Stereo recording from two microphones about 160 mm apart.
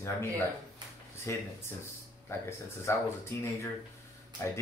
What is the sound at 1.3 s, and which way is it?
Speech, 15° left (ahead or behind).